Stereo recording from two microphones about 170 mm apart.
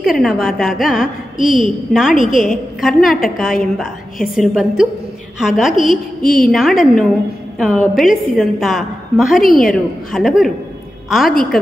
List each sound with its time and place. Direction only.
0.0 s a woman's voice: centre (ahead or behind)
6.2 s a woman's voice: 55° left (ahead or behind)
6.5 s a woman's voice: centre (ahead or behind)